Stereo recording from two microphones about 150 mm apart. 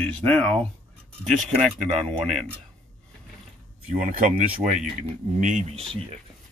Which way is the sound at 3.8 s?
60° right (ahead or behind).